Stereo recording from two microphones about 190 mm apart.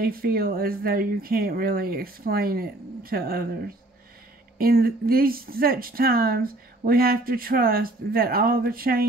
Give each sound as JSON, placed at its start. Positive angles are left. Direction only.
{"t": 0.0, "sound": "speech", "side_deg": -50}